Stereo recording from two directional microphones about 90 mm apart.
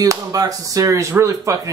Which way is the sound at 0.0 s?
40° right (ahead or behind).